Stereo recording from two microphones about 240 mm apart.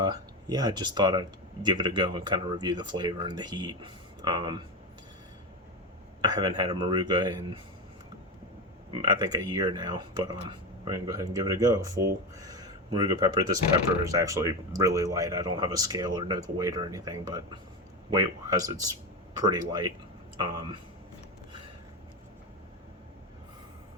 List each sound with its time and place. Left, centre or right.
0.0 s speech: centre
6.2 s speech: centre
8.9 s speech: centre